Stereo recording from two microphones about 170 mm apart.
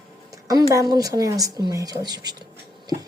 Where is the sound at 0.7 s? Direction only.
20° right (ahead or behind).